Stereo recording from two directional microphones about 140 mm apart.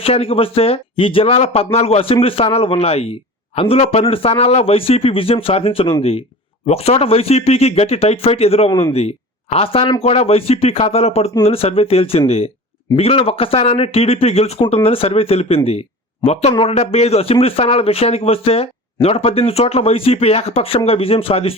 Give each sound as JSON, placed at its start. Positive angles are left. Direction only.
{"t": 0.0, "sound": "speech", "side_deg": 45}